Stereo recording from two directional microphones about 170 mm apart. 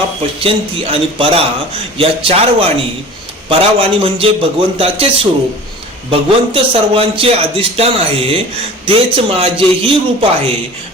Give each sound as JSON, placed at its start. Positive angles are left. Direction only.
{"t": 0.3, "sound": "a man's voice", "side_deg": -35}